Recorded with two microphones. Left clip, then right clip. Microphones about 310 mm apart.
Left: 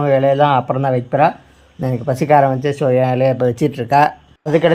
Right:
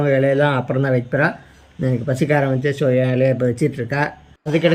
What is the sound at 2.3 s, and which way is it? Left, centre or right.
Speech, left.